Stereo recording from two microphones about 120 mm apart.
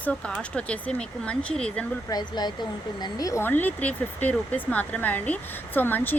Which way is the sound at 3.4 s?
15° left (ahead or behind).